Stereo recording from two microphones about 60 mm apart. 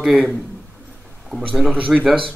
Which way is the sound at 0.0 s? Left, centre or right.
Centre.